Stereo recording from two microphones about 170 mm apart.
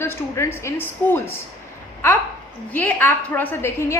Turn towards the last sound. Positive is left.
turn(degrees=15)  # may be behind; listen again after turning